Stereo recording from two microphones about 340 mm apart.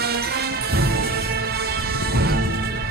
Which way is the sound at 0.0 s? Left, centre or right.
Right.